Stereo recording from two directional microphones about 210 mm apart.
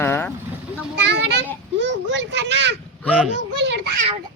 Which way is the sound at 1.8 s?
60° right (ahead or behind).